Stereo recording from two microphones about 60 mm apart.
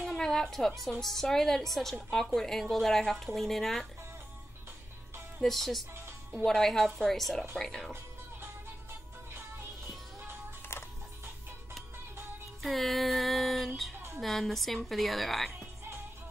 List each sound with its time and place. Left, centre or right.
0.1 s a woman's voice: centre
5.4 s speech: centre
10.7 s music: left
12.6 s speech: centre